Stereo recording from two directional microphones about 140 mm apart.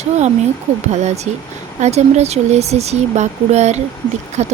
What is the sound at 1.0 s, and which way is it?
Speech, 50° right (ahead or behind).